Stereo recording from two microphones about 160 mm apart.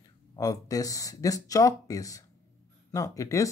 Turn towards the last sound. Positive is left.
turn(degrees=20)  # may be behind; listen again after turning